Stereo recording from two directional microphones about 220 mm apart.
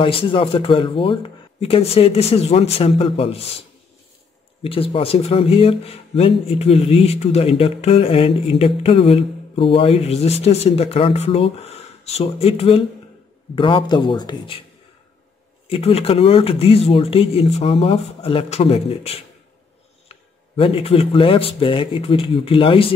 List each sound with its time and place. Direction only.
0.0 s speech: 25° left (ahead or behind)
4.6 s speech: 25° left (ahead or behind)
15.7 s speech: 25° left (ahead or behind)